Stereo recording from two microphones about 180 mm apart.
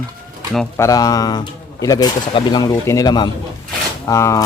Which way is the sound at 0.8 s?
20° left (ahead or behind).